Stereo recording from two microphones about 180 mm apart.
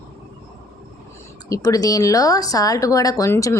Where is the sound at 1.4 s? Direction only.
20° left (ahead or behind).